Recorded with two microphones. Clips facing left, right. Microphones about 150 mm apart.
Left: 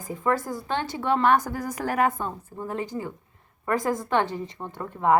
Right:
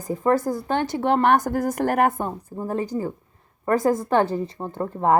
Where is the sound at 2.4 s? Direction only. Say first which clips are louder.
Right 5 dB; 35° right (ahead or behind).